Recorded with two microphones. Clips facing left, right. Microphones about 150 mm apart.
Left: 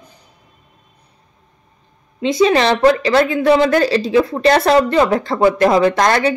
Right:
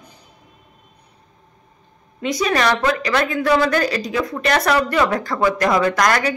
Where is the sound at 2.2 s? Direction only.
25° left (ahead or behind).